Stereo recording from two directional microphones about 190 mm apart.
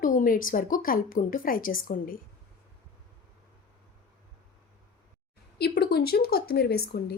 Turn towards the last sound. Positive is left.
turn(degrees=55)  # may be behind; listen again after turning